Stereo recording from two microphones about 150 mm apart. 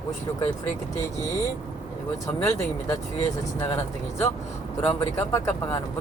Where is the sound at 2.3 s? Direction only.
20° left (ahead or behind).